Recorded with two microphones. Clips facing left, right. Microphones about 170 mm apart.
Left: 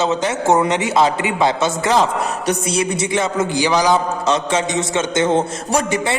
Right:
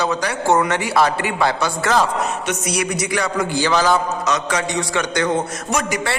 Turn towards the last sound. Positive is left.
turn(degrees=30)  # may be behind; listen again after turning